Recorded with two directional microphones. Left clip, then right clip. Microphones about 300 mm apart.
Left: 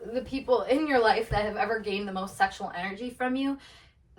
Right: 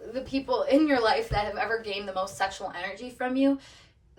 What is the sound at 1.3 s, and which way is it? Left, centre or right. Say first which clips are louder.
Speech: even; centre.